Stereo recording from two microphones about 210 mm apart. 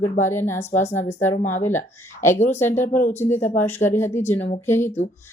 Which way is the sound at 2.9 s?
40° left (ahead or behind).